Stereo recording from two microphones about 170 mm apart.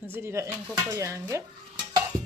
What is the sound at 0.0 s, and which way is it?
Speech, 15° right (ahead or behind).